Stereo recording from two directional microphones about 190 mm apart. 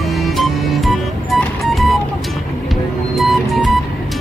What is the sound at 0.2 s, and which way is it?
Music, centre (ahead or behind).